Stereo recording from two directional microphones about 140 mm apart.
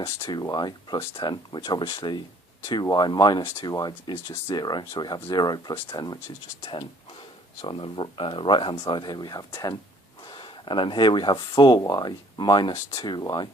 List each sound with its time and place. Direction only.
0.3 s speech: 30° left (ahead or behind)
7.6 s speech: 35° left (ahead or behind)
10.7 s speech: 35° left (ahead or behind)